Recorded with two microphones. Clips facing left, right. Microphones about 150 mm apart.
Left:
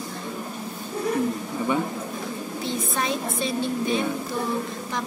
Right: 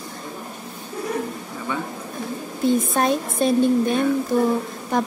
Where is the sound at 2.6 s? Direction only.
50° right (ahead or behind).